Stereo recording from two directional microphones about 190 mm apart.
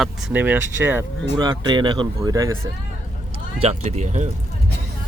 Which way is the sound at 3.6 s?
35° right (ahead or behind).